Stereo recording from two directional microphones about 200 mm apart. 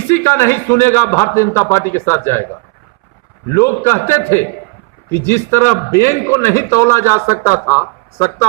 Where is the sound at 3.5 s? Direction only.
15° left (ahead or behind).